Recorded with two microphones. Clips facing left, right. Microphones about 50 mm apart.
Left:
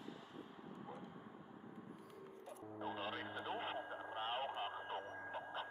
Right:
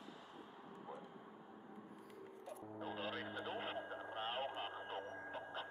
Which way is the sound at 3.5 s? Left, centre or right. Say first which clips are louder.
Left 3 dB; left.